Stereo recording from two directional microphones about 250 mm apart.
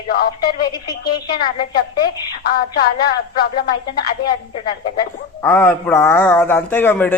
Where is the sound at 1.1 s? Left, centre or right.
Centre.